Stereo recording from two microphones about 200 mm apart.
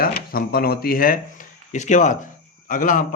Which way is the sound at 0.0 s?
50° left (ahead or behind).